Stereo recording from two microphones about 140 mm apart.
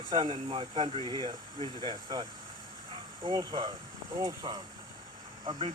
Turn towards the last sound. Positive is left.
turn(degrees=-35)  # may be behind; listen again after turning